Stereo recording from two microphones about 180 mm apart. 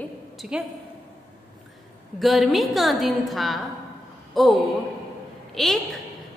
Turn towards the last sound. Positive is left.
turn(degrees=0)  # may be behind; listen again after turning